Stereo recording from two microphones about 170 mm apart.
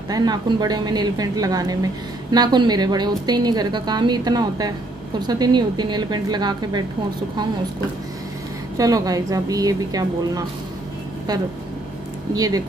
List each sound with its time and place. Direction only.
0.1 s a woman's voice: 25° right (ahead or behind)
8.7 s a woman's voice: 20° right (ahead or behind)
12.4 s a woman's voice: 20° right (ahead or behind)